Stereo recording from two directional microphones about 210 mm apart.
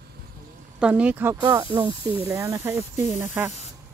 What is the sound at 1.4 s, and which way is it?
Speech, 20° right (ahead or behind).